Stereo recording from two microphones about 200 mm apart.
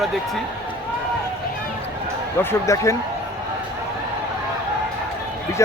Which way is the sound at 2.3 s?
15° left (ahead or behind).